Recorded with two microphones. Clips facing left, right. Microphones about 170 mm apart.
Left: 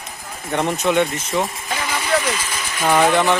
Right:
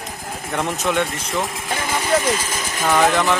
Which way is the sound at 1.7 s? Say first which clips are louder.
Right 1 dB; 45° right (ahead or behind).